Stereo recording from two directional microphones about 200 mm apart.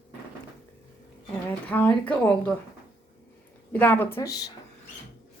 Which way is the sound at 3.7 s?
10° left (ahead or behind).